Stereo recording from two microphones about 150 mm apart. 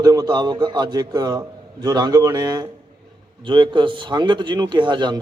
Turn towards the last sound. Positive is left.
turn(degrees=-30)  # may be behind; listen again after turning